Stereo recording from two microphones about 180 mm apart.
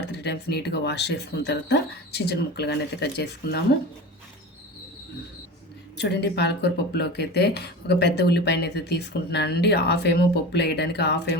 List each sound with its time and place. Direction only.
0.1 s speech: 70° left (ahead or behind)
6.0 s speech: 70° left (ahead or behind)